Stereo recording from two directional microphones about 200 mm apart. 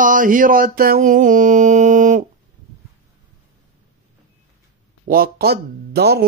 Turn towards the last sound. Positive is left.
turn(degrees=-55)  # may be behind; listen again after turning